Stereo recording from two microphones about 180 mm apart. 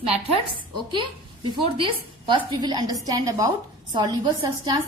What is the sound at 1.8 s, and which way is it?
A woman's voice, 25° right (ahead or behind).